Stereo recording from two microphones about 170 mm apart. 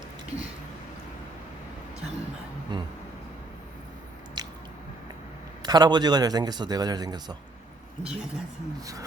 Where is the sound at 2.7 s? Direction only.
25° right (ahead or behind).